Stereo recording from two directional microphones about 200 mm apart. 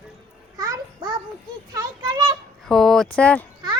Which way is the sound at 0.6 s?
20° right (ahead or behind).